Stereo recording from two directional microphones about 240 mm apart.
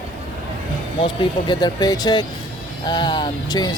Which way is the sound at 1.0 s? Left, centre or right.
Centre.